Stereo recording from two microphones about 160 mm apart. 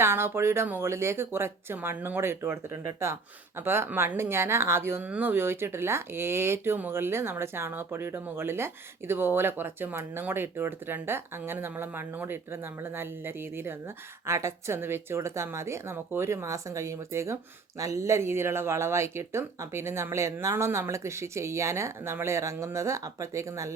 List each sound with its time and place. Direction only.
0.0 s speech: 15° right (ahead or behind)